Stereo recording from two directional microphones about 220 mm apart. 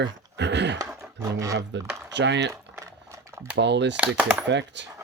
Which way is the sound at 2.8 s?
15° right (ahead or behind).